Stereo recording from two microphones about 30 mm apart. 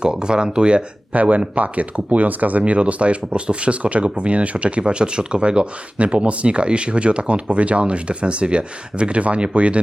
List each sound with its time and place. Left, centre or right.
0.0 s speech: right
1.1 s speech: right